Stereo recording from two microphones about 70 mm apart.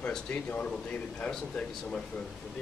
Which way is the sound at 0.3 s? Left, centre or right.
Centre.